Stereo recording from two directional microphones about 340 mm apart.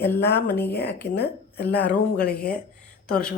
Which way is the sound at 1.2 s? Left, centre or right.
Left.